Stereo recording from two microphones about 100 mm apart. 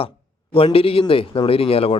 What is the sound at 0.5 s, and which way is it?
Speech, 70° left (ahead or behind).